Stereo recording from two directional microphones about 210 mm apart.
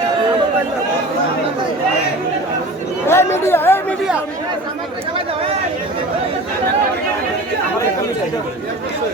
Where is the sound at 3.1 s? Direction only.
10° left (ahead or behind).